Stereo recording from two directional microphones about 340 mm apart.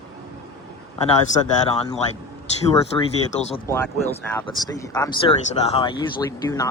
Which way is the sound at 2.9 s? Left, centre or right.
Centre.